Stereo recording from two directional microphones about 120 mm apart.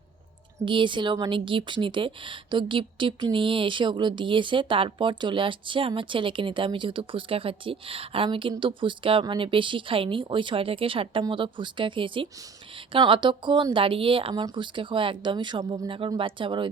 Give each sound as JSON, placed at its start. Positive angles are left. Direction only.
{"t": 0.6, "sound": "a woman's voice", "side_deg": -45}